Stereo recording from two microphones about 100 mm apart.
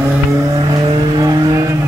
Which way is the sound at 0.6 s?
40° right (ahead or behind).